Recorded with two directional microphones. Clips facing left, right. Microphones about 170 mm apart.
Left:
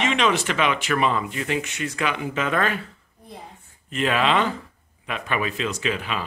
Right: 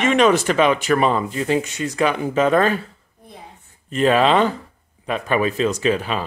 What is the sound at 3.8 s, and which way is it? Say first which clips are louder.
Speech: right 6 dB; 35° right (ahead or behind).